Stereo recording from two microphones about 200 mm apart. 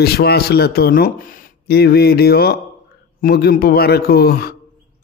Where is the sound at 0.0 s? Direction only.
55° left (ahead or behind).